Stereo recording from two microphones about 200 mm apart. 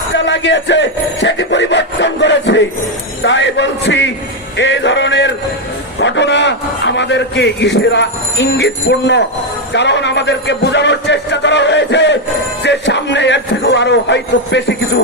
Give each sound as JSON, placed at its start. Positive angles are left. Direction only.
{"t": 0.1, "sound": "a man's voice", "side_deg": 60}